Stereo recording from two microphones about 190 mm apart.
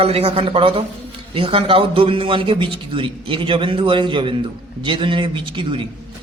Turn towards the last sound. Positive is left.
turn(degrees=-25)  # may be behind; listen again after turning